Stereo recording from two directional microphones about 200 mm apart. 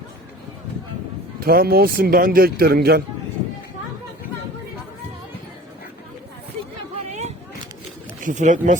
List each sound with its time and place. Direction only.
1.4 s a man's voice: 50° right (ahead or behind)
7.1 s a sound: 35° right (ahead or behind)
8.2 s speech: 40° right (ahead or behind)